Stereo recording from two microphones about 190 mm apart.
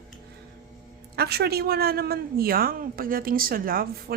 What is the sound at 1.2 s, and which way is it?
Speech, 55° right (ahead or behind).